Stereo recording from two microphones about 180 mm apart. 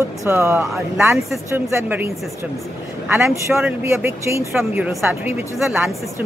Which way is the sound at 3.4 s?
15° right (ahead or behind).